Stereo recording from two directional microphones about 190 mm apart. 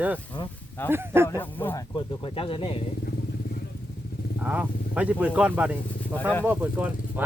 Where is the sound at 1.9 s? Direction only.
30° left (ahead or behind).